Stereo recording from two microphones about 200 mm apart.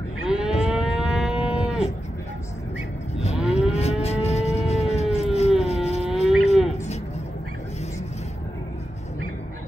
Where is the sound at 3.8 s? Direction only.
30° left (ahead or behind).